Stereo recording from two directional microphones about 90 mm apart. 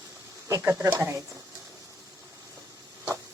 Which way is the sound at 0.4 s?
35° right (ahead or behind).